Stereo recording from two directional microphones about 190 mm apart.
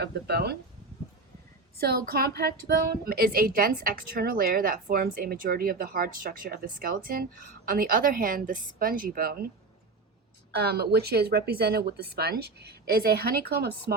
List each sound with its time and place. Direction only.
0.0 s speech: 55° right (ahead or behind)
1.8 s speech: 55° right (ahead or behind)
10.5 s speech: 55° right (ahead or behind)